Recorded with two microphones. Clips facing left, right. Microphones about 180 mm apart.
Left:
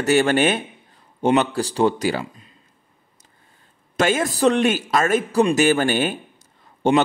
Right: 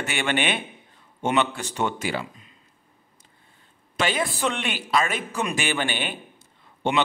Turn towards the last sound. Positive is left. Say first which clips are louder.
# left 8 dB
turn(degrees=40)  # may be behind; listen again after turning